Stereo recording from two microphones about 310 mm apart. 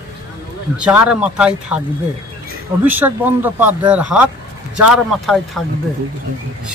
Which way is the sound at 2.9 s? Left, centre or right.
Centre.